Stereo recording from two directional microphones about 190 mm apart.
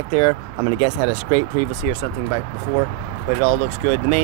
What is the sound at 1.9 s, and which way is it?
Speech, 30° right (ahead or behind).